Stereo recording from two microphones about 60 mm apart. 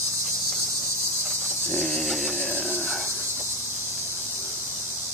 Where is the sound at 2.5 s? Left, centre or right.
Right.